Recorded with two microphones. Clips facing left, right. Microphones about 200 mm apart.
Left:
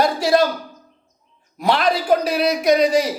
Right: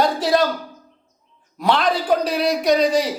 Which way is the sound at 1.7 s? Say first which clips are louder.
Left 2 dB; 10° left (ahead or behind).